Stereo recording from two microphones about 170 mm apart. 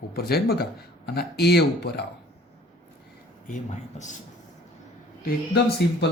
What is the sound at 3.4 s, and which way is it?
Speech, 45° left (ahead or behind).